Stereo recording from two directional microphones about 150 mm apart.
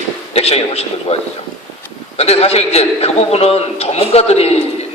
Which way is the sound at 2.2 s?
40° left (ahead or behind).